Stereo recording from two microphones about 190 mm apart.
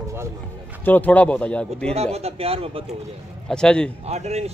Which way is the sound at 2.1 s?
30° right (ahead or behind).